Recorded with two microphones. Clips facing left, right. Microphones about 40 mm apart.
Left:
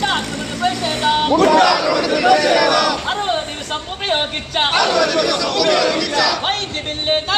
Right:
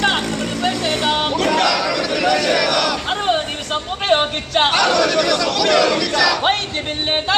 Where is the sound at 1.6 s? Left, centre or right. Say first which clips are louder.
Left 3 dB; centre.